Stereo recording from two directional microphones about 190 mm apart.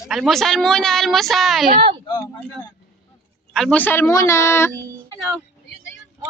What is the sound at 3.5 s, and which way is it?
Speech, 5° left (ahead or behind).